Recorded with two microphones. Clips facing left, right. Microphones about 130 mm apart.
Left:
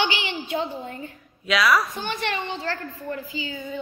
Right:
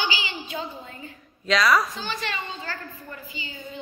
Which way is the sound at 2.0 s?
60° left (ahead or behind).